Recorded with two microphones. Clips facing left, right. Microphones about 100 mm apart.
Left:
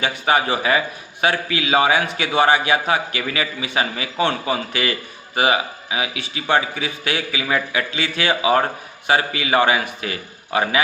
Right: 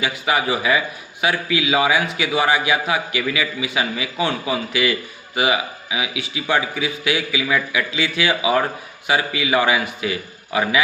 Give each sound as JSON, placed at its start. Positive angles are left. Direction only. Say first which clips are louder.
{"t": 0.0, "sound": "a man's voice", "louder": "left 2 dB", "side_deg": 30}
{"t": 2.6, "sound": "a man's voice", "louder": "left 1 dB", "side_deg": 45}